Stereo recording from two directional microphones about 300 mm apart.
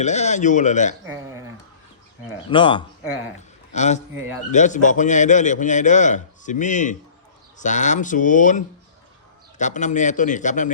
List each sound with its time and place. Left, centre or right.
0.0 s a man's voice: left
2.5 s a man's voice: centre
4.1 s a man's voice: centre
4.5 s a man's voice: left